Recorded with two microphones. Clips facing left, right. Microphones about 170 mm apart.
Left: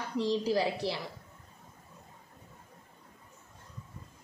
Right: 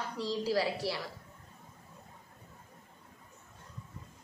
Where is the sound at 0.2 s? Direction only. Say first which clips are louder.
Left 3 dB; 20° left (ahead or behind).